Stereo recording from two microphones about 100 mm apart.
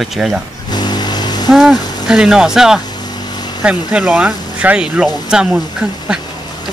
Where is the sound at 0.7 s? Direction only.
45° left (ahead or behind).